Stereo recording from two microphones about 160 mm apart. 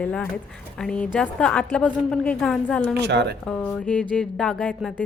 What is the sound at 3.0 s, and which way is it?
Speech, 90° right.